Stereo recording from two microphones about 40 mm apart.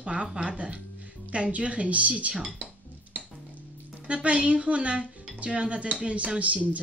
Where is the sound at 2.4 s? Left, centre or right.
Right.